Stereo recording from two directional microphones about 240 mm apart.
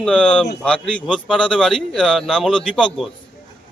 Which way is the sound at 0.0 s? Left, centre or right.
Centre.